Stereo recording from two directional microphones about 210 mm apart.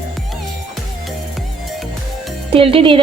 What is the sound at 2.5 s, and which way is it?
Speech, 25° right (ahead or behind).